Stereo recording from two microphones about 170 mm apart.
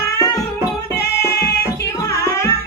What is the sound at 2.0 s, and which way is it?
Music, 20° left (ahead or behind).